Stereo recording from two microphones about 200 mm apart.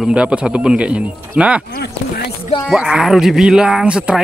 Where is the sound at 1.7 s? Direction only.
50° left (ahead or behind).